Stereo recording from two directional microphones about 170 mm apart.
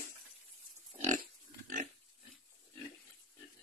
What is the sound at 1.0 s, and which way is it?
Pig, 50° right (ahead or behind).